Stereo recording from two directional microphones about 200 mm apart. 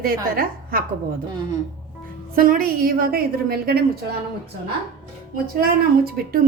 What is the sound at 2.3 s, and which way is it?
A woman's voice, 45° right (ahead or behind).